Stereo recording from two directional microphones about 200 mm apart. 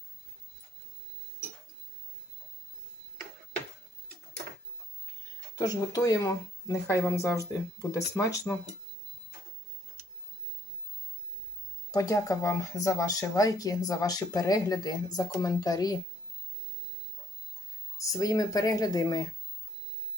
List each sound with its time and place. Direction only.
5.5 s speech: 20° left (ahead or behind)
11.9 s speech: 15° left (ahead or behind)
17.9 s speech: 15° left (ahead or behind)